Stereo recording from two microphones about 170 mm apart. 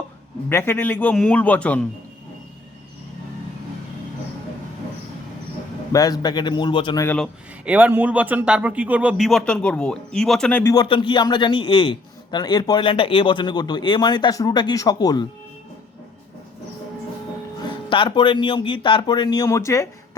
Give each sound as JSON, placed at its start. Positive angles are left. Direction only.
{"t": 0.4, "sound": "a man's voice", "side_deg": 15}
{"t": 5.9, "sound": "a man's voice", "side_deg": 20}
{"t": 7.0, "sound": "a man's voice", "side_deg": 10}
{"t": 7.6, "sound": "speech", "side_deg": -10}
{"t": 10.8, "sound": "a man's voice", "side_deg": 30}
{"t": 17.7, "sound": "a man's voice", "side_deg": 30}